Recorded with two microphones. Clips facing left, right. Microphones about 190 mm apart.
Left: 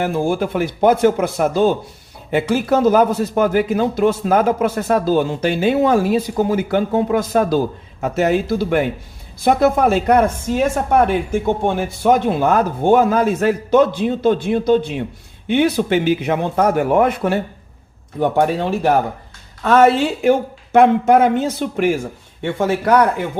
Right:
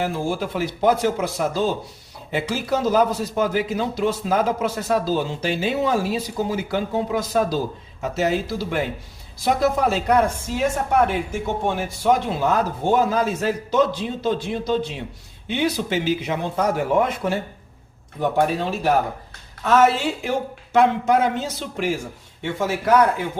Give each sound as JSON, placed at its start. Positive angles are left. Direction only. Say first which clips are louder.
{"t": 0.0, "sound": "speech", "louder": "left 6 dB", "side_deg": 55}